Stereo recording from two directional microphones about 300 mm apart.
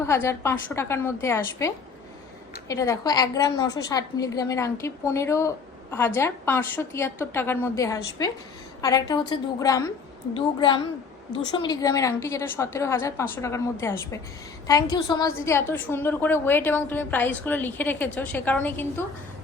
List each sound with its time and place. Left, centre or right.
0.0 s a woman's voice: centre